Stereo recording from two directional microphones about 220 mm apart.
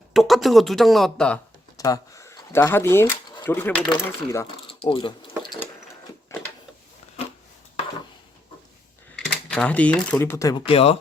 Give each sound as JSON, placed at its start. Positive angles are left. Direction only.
{"t": 0.1, "sound": "speech", "side_deg": 0}
{"t": 1.8, "sound": "speech", "side_deg": 15}
{"t": 4.6, "sound": "a sound", "side_deg": 25}
{"t": 6.3, "sound": "a sound", "side_deg": 15}
{"t": 9.1, "sound": "speech", "side_deg": 0}
{"t": 10.7, "sound": "speech", "side_deg": 25}